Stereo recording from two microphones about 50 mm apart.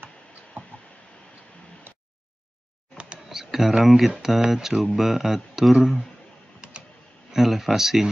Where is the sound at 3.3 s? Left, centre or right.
Centre.